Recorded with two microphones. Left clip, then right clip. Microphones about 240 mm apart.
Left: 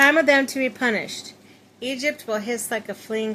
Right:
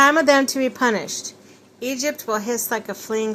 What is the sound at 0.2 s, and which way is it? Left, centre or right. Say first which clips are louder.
A woman's voice: right 2 dB; centre.